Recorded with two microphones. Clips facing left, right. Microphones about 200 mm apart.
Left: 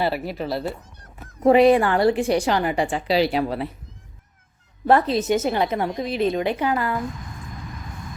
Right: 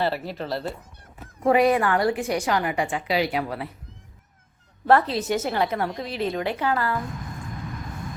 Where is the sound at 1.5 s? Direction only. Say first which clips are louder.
Left 4 dB; 30° left (ahead or behind).